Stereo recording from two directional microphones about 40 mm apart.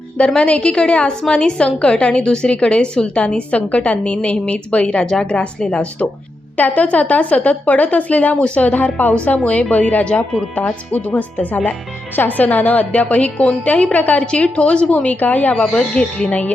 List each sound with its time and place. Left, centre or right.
0.3 s a woman's voice: left
10.0 s a woman's voice: left
10.9 s speech: left
12.1 s speech: left
12.5 s speech: left
14.3 s speech: left
15.5 s a woman's voice: centre